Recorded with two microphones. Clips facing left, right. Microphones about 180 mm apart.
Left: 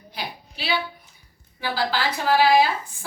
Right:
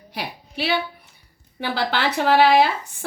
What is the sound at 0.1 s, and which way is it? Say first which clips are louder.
A woman's voice: right 3 dB; 65° right (ahead or behind).